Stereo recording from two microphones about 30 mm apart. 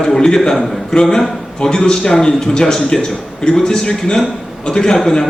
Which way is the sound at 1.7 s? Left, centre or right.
Left.